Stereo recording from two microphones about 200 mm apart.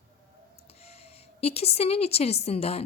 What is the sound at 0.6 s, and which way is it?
Speech, 30° left (ahead or behind).